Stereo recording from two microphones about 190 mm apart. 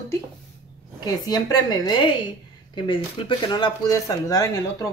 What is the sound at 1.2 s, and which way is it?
Speech, 20° left (ahead or behind).